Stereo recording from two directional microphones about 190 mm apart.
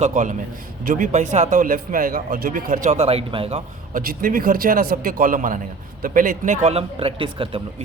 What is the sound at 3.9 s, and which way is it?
Speech, 50° right (ahead or behind).